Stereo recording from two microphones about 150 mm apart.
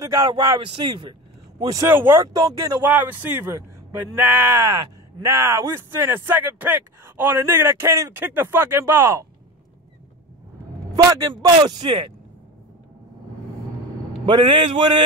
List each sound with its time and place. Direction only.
0.0 s speech: 20° right (ahead or behind)
2.9 s speech: 10° right (ahead or behind)
11.1 s speech: 25° right (ahead or behind)
14.3 s speech: 30° right (ahead or behind)